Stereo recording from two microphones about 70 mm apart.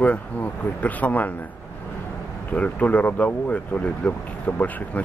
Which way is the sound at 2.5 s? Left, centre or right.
Left.